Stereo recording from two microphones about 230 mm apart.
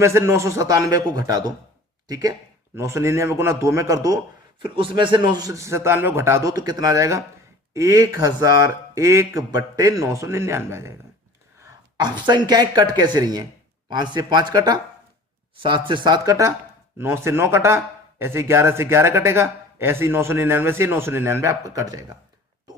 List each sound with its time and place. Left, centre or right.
0.0 s speech: centre
11.6 s a sound: centre
12.2 s speech: centre
15.9 s speech: centre